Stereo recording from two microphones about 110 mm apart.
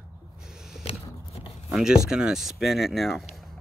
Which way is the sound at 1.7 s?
5° right (ahead or behind).